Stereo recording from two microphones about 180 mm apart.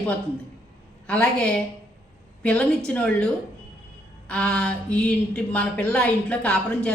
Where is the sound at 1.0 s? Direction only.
5° left (ahead or behind).